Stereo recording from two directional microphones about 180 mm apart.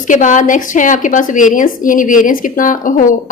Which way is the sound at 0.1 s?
45° left (ahead or behind).